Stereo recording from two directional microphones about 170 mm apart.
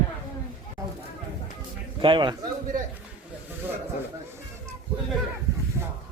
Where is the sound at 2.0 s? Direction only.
30° right (ahead or behind).